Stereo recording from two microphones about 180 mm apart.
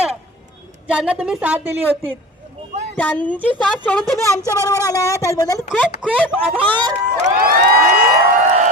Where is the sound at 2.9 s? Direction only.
10° left (ahead or behind).